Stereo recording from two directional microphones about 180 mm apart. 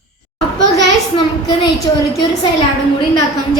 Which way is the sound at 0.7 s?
25° left (ahead or behind).